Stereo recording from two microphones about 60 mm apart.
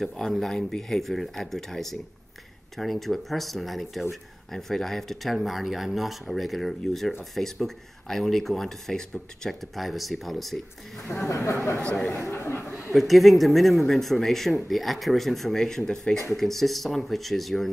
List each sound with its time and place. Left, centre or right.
0.0 s speech: centre
11.2 s speech: left
11.8 s speech: centre
12.1 s speech: left
12.9 s speech: centre